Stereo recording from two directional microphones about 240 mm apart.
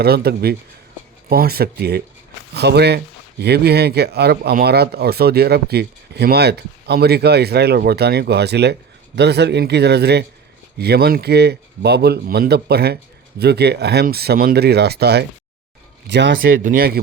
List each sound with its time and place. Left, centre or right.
0.0 s a man's voice: right